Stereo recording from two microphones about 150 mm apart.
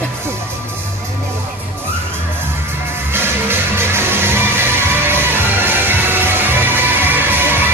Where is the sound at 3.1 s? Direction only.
15° right (ahead or behind).